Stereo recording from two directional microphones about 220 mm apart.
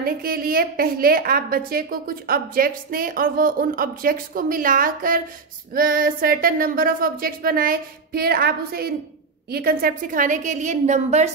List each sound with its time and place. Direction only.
0.0 s a woman's voice: 40° right (ahead or behind)